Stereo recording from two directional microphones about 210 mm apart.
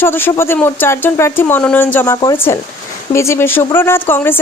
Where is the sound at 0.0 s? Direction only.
10° left (ahead or behind).